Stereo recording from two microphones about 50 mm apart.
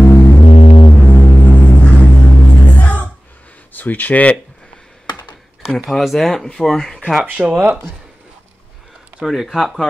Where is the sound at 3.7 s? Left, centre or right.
Left.